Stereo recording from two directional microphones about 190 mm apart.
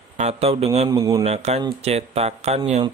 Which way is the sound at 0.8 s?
20° right (ahead or behind).